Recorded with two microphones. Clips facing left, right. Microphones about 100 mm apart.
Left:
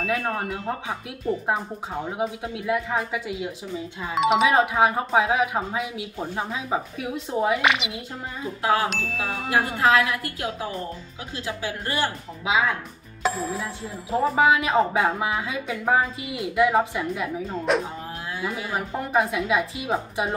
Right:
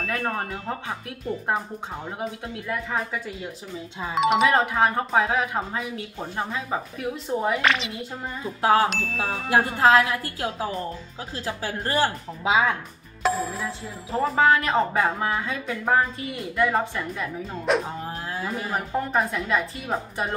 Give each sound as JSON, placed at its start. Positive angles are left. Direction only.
{"t": 0.0, "sound": "a woman's voice", "side_deg": 0}
{"t": 8.6, "sound": "speech", "side_deg": -30}
{"t": 8.9, "sound": "a woman's voice", "side_deg": 0}
{"t": 9.5, "sound": "speech", "side_deg": -30}
{"t": 13.2, "sound": "music", "side_deg": 0}
{"t": 14.2, "sound": "a woman's voice", "side_deg": 10}